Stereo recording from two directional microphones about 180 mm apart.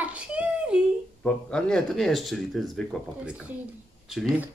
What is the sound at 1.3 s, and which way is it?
Speech, 5° left (ahead or behind).